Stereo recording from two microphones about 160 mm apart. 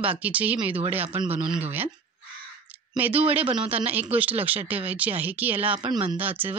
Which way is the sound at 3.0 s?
10° right (ahead or behind).